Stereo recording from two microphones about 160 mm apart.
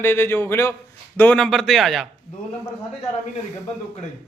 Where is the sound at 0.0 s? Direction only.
15° left (ahead or behind).